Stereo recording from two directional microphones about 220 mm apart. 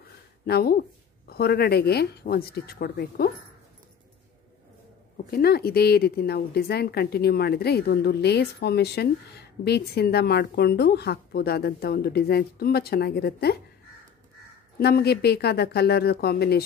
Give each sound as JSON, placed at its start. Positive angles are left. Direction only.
{"t": 0.0, "sound": "speech", "side_deg": 45}
{"t": 5.1, "sound": "a woman's voice", "side_deg": 45}
{"t": 14.8, "sound": "a woman's voice", "side_deg": 45}